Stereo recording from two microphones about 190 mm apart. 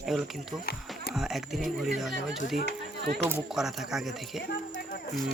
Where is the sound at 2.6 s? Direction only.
60° right (ahead or behind).